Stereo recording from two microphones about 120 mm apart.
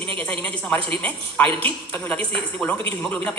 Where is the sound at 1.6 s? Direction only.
10° left (ahead or behind).